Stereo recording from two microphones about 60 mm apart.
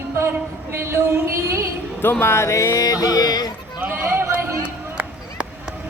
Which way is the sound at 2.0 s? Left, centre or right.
Left.